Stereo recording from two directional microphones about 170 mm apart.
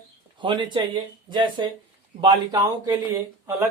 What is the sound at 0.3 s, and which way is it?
Speech, 30° right (ahead or behind).